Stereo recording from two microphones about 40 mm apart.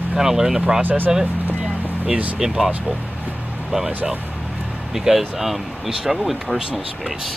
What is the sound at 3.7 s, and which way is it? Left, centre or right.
Speech, right.